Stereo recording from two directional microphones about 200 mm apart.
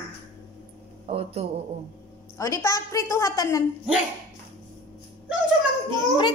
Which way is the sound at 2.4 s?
15° left (ahead or behind).